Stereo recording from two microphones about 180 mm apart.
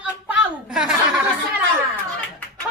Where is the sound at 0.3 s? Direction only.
5° right (ahead or behind).